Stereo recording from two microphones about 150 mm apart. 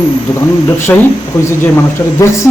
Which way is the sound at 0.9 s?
10° left (ahead or behind).